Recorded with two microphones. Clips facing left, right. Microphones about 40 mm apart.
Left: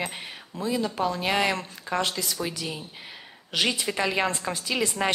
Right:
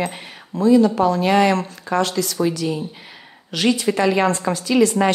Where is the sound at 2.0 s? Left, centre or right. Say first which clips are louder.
Right 8 dB; centre.